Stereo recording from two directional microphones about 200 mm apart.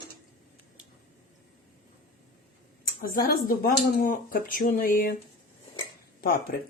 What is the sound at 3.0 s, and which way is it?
Speech, 45° left (ahead or behind).